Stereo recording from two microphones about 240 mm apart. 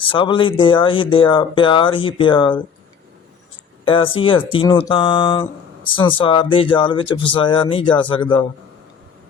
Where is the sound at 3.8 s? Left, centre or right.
Left.